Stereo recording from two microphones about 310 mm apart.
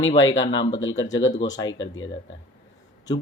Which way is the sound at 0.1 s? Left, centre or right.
Centre.